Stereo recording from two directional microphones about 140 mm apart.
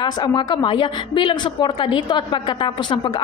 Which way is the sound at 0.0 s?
35° left (ahead or behind).